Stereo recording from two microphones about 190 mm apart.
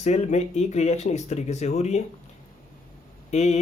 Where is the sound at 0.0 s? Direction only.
35° left (ahead or behind).